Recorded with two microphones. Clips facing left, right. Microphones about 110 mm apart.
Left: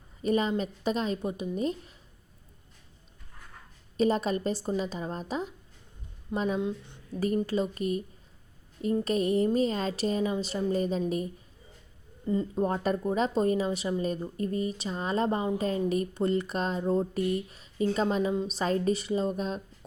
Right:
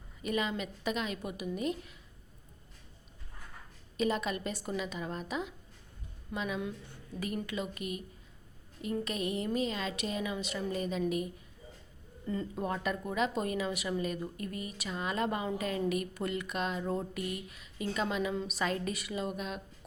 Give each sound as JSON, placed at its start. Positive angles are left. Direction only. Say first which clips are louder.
{"t": 0.2, "sound": "speech", "louder": "left 7 dB", "side_deg": 35}
{"t": 3.9, "sound": "speech", "louder": "left 6 dB", "side_deg": 35}
{"t": 6.6, "sound": "speech", "louder": "left 7 dB", "side_deg": 20}
{"t": 7.4, "sound": "speech", "louder": "left 8 dB", "side_deg": 35}
{"t": 12.2, "sound": "speech", "louder": "left 8 dB", "side_deg": 20}
{"t": 12.6, "sound": "speech", "louder": "left 5 dB", "side_deg": 35}